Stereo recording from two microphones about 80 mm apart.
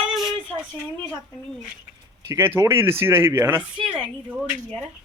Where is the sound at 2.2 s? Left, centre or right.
Right.